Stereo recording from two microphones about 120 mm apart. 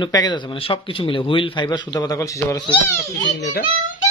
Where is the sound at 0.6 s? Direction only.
50° left (ahead or behind); by 2.6 s 30° left (ahead or behind).